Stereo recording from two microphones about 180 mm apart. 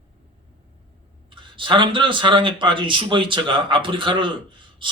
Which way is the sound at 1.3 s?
25° right (ahead or behind).